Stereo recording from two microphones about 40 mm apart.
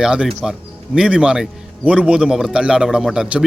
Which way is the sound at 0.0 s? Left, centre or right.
Right.